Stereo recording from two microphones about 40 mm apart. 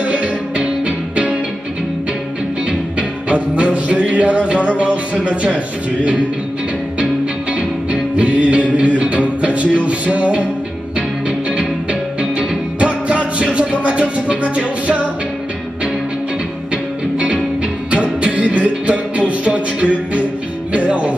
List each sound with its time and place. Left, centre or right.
0.0 s music: right
3.0 s music: right
7.9 s music: right
17.9 s music: right